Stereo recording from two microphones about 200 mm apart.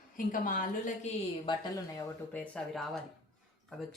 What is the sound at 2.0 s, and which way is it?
Speech, 10° left (ahead or behind).